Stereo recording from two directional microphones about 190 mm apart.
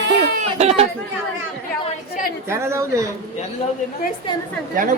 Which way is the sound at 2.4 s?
15° right (ahead or behind).